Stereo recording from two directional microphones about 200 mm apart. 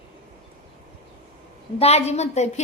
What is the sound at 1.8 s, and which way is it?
Speech, 30° left (ahead or behind).